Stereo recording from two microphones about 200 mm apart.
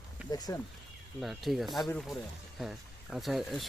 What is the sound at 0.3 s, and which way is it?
Speech, 20° left (ahead or behind).